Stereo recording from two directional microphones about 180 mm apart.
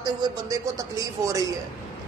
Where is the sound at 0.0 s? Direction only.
20° right (ahead or behind).